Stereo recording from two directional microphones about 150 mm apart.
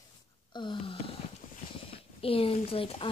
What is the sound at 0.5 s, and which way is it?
Speech, 30° left (ahead or behind).